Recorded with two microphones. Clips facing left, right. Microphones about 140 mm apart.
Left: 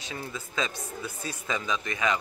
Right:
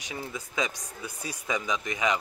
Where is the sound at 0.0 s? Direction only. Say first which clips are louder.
Even; 15° right (ahead or behind).